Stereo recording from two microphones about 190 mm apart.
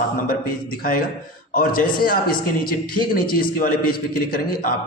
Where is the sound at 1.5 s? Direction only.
45° left (ahead or behind).